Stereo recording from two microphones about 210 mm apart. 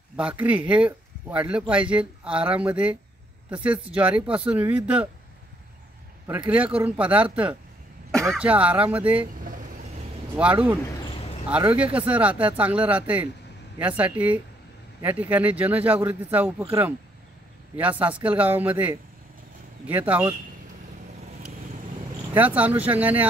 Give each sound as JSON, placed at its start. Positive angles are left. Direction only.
{"t": 0.1, "sound": "speech", "side_deg": -5}
{"t": 6.2, "sound": "speech", "side_deg": -10}
{"t": 10.3, "sound": "speech", "side_deg": -5}
{"t": 17.7, "sound": "speech", "side_deg": -5}
{"t": 22.3, "sound": "speech", "side_deg": -5}